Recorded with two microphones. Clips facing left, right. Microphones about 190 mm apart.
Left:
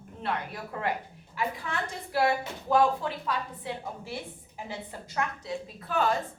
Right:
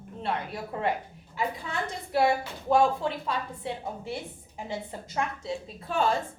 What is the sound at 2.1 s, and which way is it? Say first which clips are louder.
A woman's voice: right 2 dB; 20° right (ahead or behind).